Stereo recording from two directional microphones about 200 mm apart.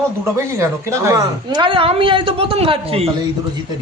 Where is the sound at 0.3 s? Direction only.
15° right (ahead or behind); by 3.1 s 30° right (ahead or behind).